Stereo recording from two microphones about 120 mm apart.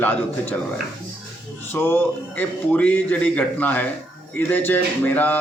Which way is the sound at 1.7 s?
20° left (ahead or behind).